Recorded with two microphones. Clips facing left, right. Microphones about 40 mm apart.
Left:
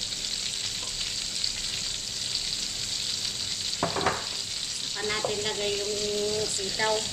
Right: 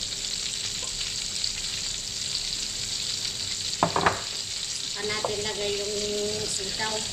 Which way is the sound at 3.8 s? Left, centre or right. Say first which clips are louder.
Right 5 dB; centre.